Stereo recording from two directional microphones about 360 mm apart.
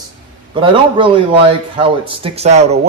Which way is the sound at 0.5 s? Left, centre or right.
Centre.